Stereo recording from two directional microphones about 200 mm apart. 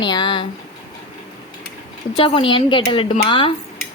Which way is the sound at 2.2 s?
25° left (ahead or behind).